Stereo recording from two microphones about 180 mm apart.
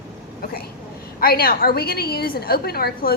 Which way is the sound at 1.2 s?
55° left (ahead or behind).